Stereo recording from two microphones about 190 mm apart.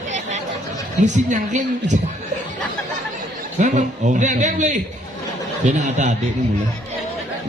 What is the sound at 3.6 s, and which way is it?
A man's voice, 40° right (ahead or behind).